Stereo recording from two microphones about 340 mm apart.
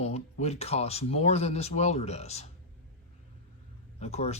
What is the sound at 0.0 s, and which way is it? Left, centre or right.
Speech, centre.